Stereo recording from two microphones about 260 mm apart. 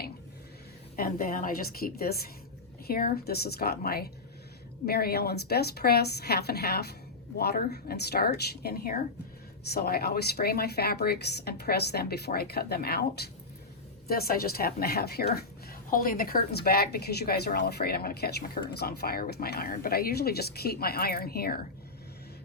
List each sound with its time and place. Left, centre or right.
0.9 s a woman's voice: left